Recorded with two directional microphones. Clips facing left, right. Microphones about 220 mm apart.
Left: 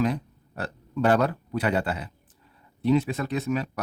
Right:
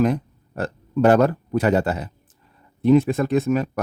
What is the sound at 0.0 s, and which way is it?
Speech, 50° right (ahead or behind).